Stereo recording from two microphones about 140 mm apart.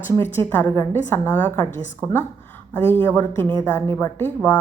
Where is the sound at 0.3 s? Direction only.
10° left (ahead or behind).